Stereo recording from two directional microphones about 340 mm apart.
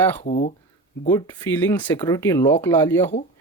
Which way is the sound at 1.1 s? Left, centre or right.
Centre.